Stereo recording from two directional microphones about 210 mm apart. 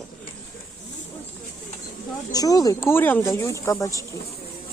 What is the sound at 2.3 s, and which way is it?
Speech, 20° left (ahead or behind).